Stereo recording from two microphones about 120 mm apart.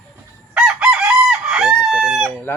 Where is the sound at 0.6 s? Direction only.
10° right (ahead or behind).